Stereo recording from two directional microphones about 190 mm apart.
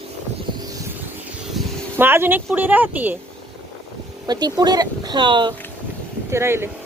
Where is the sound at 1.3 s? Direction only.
10° right (ahead or behind).